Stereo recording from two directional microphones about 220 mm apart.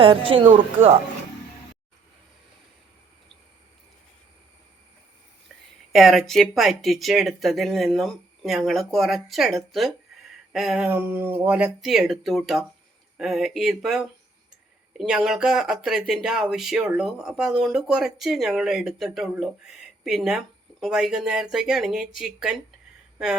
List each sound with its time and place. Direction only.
0.0 s speech: 25° right (ahead or behind)
5.9 s speech: centre (ahead or behind)